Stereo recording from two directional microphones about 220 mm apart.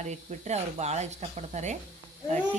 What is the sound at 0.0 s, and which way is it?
Speech, 30° right (ahead or behind).